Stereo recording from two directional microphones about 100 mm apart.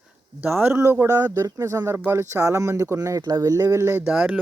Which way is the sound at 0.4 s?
20° right (ahead or behind).